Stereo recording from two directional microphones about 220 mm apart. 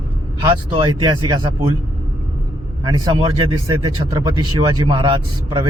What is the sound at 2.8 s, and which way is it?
Speech, 20° right (ahead or behind).